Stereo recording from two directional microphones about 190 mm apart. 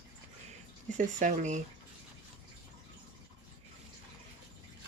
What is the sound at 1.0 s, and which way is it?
Speech, 40° right (ahead or behind).